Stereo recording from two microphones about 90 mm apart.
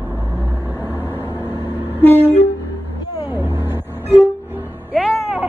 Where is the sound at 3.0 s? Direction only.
50° left (ahead or behind).